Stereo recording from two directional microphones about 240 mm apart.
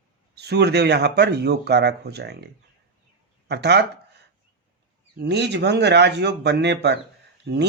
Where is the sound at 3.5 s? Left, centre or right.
Right.